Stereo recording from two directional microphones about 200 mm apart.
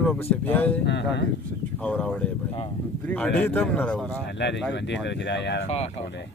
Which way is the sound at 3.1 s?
5° left (ahead or behind).